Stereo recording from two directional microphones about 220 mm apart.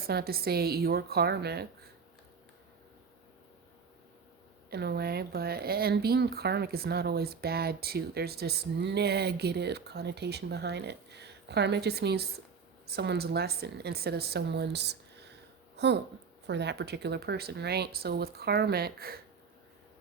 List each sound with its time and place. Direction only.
0.0 s speech: 45° right (ahead or behind)
4.7 s speech: 45° right (ahead or behind)